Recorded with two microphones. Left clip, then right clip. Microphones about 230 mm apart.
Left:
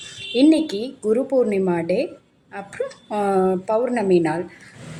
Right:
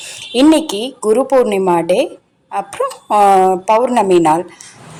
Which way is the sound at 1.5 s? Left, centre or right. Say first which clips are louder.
Right 8 dB; right.